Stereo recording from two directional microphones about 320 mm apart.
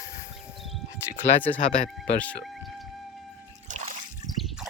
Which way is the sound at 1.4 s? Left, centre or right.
Centre.